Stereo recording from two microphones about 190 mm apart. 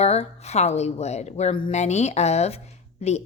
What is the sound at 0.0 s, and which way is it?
A woman's voice, 35° left (ahead or behind).